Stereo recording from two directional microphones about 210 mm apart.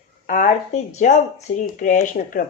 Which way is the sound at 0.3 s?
40° left (ahead or behind).